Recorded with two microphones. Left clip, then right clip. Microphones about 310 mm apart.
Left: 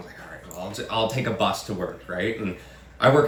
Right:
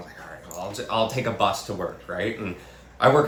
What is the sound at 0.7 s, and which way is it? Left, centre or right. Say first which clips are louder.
Speech: right 1 dB; centre.